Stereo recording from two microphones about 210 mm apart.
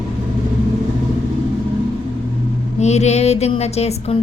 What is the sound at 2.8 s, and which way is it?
A woman's voice, 30° left (ahead or behind).